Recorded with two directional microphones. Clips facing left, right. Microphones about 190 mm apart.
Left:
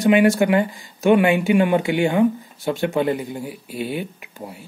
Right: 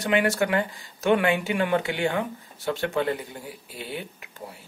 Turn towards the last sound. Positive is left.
turn(degrees=15)  # may be behind; listen again after turning